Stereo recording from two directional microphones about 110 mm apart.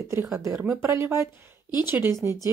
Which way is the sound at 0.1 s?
25° right (ahead or behind).